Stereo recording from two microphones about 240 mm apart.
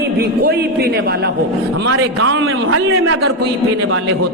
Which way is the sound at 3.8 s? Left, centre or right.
Right.